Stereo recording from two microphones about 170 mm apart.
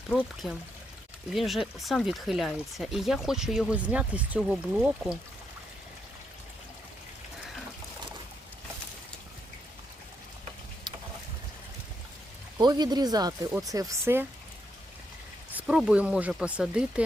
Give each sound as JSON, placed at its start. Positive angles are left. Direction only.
{"t": 0.4, "sound": "speech", "side_deg": 0}
{"t": 10.9, "sound": "a sound", "side_deg": -25}
{"t": 12.5, "sound": "speech", "side_deg": -25}
{"t": 15.6, "sound": "speech", "side_deg": -5}